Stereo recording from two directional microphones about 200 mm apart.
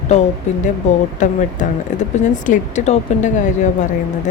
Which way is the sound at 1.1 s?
35° left (ahead or behind).